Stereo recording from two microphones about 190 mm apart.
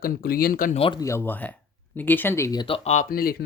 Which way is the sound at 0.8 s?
30° left (ahead or behind).